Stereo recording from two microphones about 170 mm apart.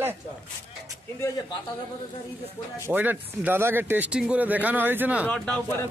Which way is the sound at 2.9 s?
10° right (ahead or behind).